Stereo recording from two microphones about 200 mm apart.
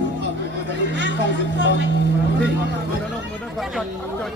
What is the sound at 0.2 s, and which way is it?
Music, 65° left (ahead or behind).